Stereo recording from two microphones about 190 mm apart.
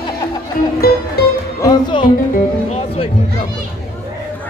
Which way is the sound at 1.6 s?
25° left (ahead or behind).